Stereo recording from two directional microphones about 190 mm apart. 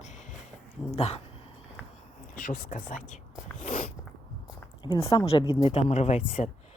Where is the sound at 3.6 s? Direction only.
40° left (ahead or behind).